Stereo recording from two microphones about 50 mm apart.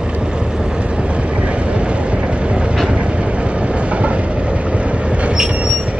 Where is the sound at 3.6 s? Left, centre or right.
Right.